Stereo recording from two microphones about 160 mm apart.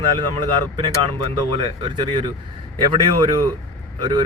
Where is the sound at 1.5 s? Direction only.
35° right (ahead or behind).